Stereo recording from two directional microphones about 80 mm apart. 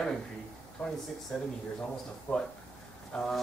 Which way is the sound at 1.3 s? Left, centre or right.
Centre.